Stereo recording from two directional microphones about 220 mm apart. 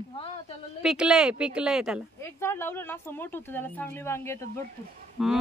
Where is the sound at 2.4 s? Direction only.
10° left (ahead or behind).